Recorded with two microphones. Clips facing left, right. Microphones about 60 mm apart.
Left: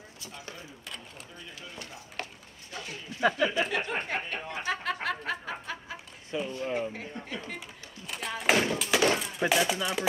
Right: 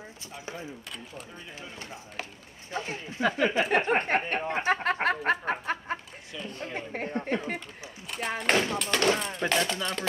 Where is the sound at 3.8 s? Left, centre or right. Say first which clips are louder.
Right 7 dB; right.